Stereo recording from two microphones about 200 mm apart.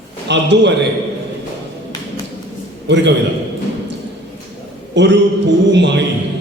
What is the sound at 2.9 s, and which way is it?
Speech, 60° right (ahead or behind).